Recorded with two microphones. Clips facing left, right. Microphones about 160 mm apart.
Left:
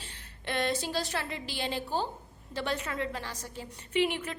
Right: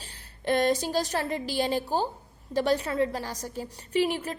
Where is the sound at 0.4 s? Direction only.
40° right (ahead or behind).